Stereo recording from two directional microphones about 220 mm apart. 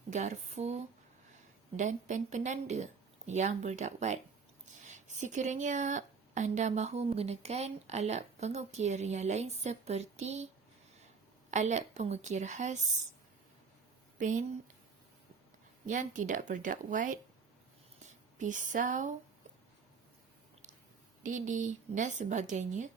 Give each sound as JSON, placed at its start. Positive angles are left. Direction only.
{"t": 0.1, "sound": "speech", "side_deg": -30}
{"t": 11.5, "sound": "speech", "side_deg": -30}
{"t": 14.2, "sound": "speech", "side_deg": -35}
{"t": 15.9, "sound": "speech", "side_deg": -35}
{"t": 21.2, "sound": "speech", "side_deg": -35}